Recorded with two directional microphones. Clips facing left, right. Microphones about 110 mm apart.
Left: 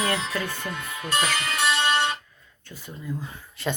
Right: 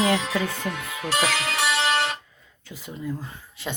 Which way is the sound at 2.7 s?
75° right (ahead or behind).